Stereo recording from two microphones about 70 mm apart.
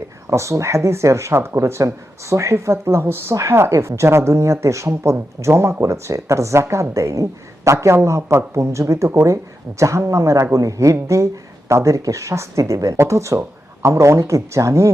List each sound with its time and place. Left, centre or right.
0.3 s speech: right